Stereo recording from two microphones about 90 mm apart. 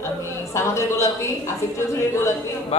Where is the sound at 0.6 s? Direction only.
35° left (ahead or behind).